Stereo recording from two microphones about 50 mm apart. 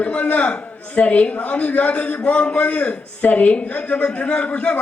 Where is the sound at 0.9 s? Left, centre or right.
Left.